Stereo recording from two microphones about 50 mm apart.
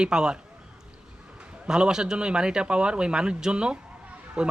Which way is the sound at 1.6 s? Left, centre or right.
Centre.